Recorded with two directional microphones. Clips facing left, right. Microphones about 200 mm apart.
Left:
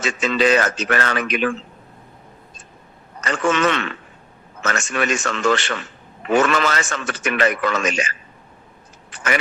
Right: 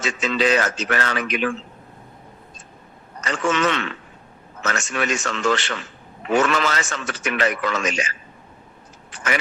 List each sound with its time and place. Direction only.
0.0 s a man's voice: 55° left (ahead or behind)
3.2 s a man's voice: 55° left (ahead or behind)